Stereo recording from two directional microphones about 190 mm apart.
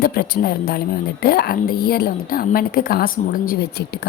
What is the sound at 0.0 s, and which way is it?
A woman's voice, 55° left (ahead or behind).